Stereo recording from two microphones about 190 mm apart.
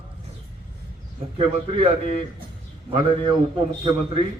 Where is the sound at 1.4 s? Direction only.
30° right (ahead or behind).